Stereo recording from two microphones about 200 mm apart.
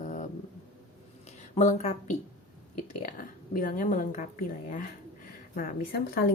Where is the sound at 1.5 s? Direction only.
35° left (ahead or behind).